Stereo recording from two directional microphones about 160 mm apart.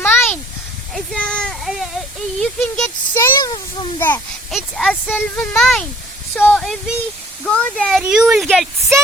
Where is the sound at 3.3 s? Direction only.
25° left (ahead or behind).